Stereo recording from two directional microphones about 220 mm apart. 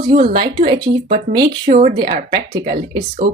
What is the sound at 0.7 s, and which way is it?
Speech, 40° right (ahead or behind).